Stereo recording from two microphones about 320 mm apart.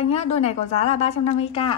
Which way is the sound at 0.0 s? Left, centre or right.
Centre.